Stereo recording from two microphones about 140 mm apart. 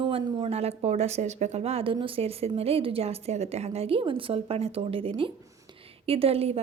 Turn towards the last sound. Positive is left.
turn(degrees=-45)  # may be behind; listen again after turning